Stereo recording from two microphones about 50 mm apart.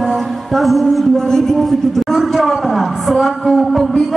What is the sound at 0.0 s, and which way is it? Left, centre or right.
A man's voice, centre.